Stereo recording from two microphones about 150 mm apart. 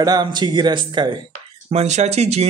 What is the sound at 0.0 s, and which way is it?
Speech, 30° right (ahead or behind).